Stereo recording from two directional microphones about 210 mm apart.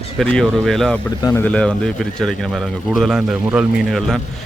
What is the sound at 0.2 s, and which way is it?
Speech, centre (ahead or behind).